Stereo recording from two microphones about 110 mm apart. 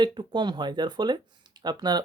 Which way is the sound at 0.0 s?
45° right (ahead or behind).